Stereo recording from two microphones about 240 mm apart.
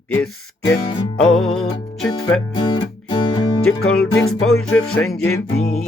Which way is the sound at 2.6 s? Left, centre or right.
Centre.